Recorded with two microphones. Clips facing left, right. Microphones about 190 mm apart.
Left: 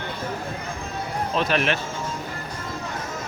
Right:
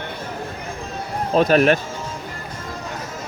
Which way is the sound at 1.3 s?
40° right (ahead or behind).